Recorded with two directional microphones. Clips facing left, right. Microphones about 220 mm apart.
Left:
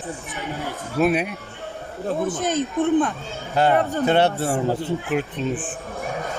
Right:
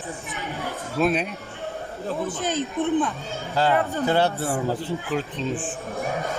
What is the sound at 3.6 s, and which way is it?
A man's voice, 20° left (ahead or behind).